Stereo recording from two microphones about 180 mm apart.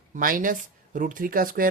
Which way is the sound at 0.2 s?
50° right (ahead or behind).